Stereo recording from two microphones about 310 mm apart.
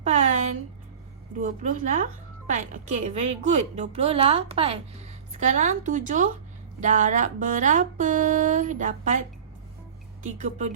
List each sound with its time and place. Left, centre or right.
1.4 s speech: right
10.2 s speech: right